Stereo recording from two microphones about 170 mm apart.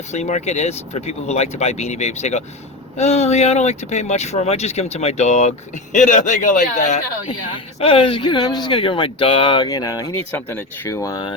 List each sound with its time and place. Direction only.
0.1 s speech: 40° left (ahead or behind)
7.3 s speech: 30° left (ahead or behind)